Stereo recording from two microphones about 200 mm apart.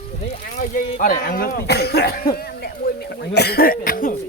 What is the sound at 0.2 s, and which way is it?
Speech, 40° left (ahead or behind).